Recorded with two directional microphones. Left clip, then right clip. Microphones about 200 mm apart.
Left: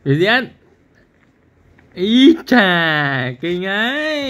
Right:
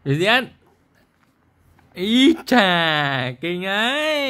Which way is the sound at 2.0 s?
25° right (ahead or behind).